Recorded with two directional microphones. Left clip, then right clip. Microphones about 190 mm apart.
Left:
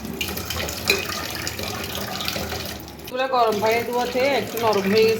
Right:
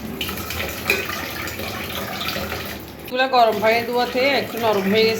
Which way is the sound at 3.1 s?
5° left (ahead or behind).